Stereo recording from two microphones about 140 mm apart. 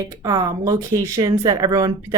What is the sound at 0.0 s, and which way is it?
Speech, 25° right (ahead or behind).